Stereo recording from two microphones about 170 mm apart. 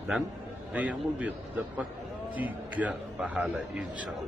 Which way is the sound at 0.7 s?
10° right (ahead or behind).